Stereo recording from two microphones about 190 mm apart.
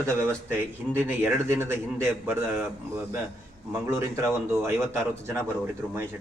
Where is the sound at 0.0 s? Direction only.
10° right (ahead or behind).